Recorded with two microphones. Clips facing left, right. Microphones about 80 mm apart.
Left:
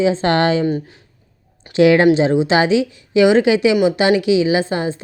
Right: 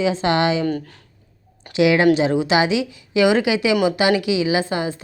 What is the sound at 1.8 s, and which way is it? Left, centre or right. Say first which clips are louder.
A woman's voice: left 4 dB; left.